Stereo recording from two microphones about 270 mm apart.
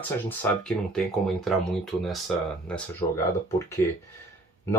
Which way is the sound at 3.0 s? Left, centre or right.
Centre.